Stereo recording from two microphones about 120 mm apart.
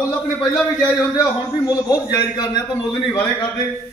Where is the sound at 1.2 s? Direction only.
25° left (ahead or behind).